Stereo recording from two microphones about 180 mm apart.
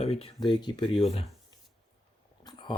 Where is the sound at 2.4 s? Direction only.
25° left (ahead or behind).